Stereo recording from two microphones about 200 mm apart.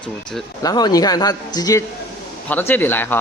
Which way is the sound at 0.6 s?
20° left (ahead or behind).